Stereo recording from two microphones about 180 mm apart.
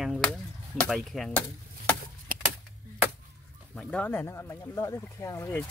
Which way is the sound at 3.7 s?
5° left (ahead or behind).